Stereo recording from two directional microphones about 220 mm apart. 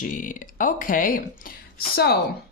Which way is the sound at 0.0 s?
35° left (ahead or behind).